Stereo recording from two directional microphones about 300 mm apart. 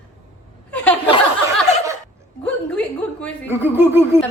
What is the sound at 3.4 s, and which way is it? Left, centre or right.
Speech, centre.